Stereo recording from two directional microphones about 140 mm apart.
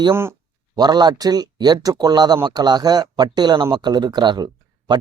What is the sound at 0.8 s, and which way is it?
Speech, 30° right (ahead or behind).